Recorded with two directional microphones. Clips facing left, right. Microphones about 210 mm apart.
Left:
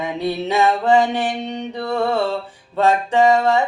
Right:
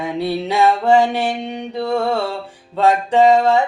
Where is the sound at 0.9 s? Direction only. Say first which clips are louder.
Right 2 dB; 10° right (ahead or behind).